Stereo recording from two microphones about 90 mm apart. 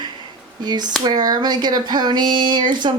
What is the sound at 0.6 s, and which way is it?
Speech, 55° right (ahead or behind).